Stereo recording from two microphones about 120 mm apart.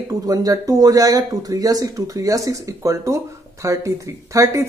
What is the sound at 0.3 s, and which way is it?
A woman's voice, 30° right (ahead or behind).